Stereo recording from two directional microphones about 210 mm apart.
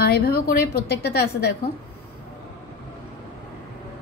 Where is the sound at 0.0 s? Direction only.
50° left (ahead or behind).